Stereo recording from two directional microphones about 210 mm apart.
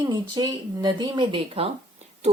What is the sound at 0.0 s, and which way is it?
Speech, 20° right (ahead or behind).